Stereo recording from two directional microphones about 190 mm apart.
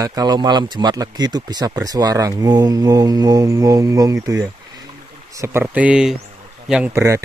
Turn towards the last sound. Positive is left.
turn(degrees=-15)  # may be behind; listen again after turning